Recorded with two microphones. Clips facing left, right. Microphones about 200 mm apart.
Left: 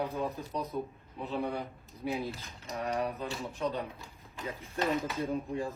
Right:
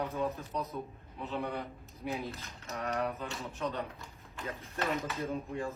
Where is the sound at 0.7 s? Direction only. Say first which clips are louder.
Left 4 dB; 5° left (ahead or behind).